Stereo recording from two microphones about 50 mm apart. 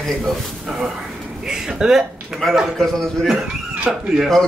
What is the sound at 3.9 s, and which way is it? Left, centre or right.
Speech, centre.